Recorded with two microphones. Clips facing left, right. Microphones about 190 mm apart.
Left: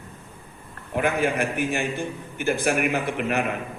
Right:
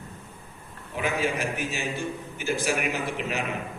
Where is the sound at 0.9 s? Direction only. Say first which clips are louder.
Left 5 dB; 55° left (ahead or behind).